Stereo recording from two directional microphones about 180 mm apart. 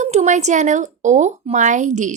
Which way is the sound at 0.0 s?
40° right (ahead or behind).